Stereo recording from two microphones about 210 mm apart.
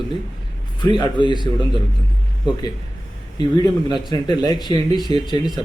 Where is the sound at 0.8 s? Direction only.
20° left (ahead or behind).